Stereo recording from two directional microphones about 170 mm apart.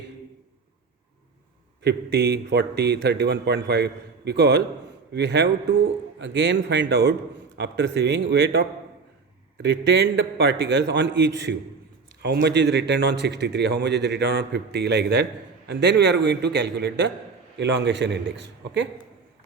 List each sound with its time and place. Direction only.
1.8 s a man's voice: 80° right
5.1 s a man's voice: 90° right